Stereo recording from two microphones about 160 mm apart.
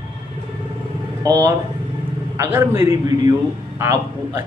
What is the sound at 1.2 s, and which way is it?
A man's voice, 20° right (ahead or behind).